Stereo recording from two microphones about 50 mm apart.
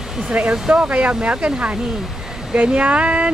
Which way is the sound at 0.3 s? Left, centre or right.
Right.